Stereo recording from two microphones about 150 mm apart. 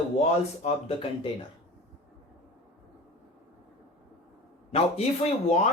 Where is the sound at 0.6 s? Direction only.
40° left (ahead or behind).